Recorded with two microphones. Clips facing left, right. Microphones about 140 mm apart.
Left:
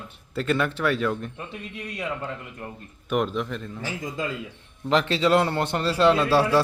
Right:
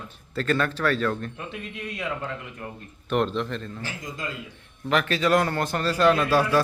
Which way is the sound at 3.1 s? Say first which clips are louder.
Even; 5° left (ahead or behind).